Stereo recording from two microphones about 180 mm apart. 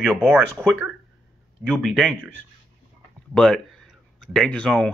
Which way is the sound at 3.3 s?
5° left (ahead or behind).